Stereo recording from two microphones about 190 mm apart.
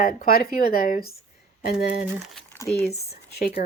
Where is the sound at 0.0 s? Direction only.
50° left (ahead or behind).